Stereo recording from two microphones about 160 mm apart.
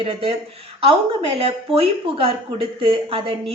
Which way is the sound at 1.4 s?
35° right (ahead or behind).